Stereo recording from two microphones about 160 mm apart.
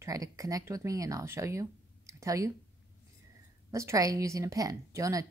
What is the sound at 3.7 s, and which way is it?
Speech, 20° right (ahead or behind).